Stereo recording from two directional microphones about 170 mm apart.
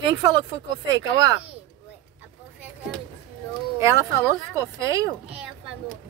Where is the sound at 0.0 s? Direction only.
25° right (ahead or behind).